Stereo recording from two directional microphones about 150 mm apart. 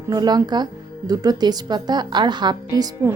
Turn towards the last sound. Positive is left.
turn(degrees=-25)  # may be behind; listen again after turning